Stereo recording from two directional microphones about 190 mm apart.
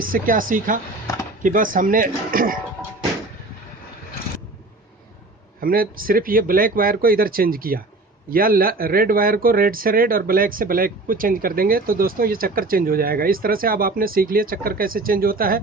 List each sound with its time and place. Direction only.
0.0 s a man's voice: 45° right (ahead or behind)
5.5 s a man's voice: 50° right (ahead or behind)